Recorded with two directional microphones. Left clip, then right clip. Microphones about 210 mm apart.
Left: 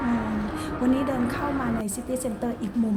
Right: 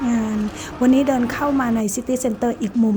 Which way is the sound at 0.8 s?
35° right (ahead or behind).